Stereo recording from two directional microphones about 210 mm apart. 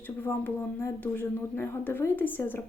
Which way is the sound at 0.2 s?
10° left (ahead or behind).